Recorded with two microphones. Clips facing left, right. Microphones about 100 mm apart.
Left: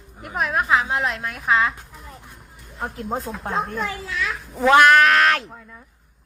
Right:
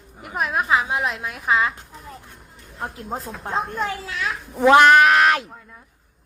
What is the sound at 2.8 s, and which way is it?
A woman's voice, centre (ahead or behind).